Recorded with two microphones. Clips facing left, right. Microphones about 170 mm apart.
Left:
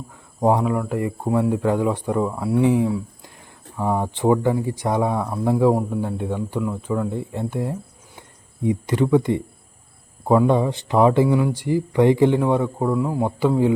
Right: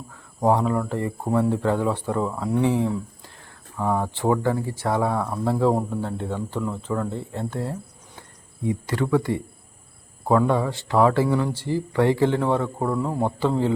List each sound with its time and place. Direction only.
0.1 s speech: 15° left (ahead or behind)